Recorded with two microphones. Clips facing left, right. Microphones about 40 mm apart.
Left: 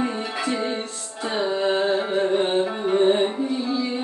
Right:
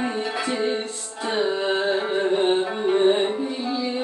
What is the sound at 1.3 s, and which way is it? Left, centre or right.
Carnatic music, centre.